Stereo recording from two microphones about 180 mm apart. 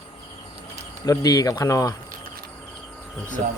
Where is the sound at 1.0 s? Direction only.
20° left (ahead or behind).